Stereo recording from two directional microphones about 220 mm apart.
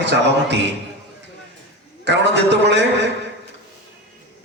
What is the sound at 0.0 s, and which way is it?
Speech, 50° right (ahead or behind).